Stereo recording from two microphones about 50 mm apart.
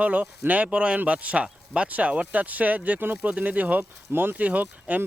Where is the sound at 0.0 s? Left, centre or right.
Right.